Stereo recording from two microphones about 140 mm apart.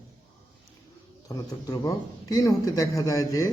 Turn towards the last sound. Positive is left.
turn(degrees=25)  # may be behind; listen again after turning